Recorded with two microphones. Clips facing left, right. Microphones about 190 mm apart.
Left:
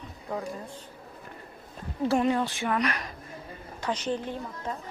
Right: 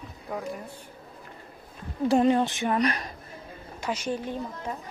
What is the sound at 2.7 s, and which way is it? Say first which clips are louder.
Speech: right 3 dB; 30° right (ahead or behind).